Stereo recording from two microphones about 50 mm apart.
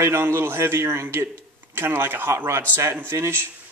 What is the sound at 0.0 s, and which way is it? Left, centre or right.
A man's voice, right.